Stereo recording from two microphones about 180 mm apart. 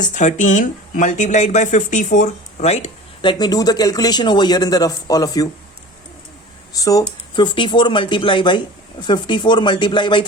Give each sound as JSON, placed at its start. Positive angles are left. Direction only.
{"t": 0.0, "sound": "speech", "side_deg": 40}
{"t": 6.7, "sound": "speech", "side_deg": 20}